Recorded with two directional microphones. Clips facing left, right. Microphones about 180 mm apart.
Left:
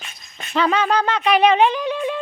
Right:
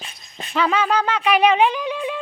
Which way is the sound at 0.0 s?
30° right (ahead or behind).